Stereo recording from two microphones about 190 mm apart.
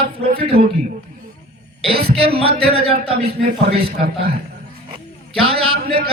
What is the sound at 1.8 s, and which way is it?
Speech, 30° right (ahead or behind).